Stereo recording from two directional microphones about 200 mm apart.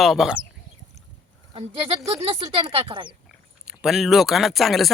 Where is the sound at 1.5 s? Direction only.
30° right (ahead or behind).